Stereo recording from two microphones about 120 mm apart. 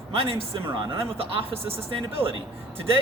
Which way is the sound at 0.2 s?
50° right (ahead or behind).